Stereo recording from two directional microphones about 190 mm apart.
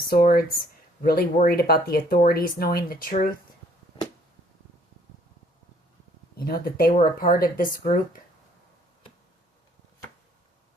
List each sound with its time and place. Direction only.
0.1 s speech: 55° left (ahead or behind)
6.3 s speech: 50° left (ahead or behind)